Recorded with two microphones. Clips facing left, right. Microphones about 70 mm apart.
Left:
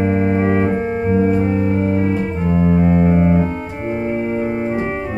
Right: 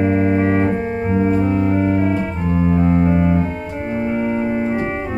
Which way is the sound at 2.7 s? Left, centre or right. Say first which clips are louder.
Left 1 dB; left.